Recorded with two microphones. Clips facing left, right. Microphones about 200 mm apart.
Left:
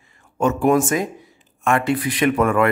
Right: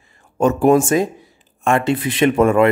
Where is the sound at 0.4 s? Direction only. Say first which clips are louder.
Right 4 dB; 35° right (ahead or behind).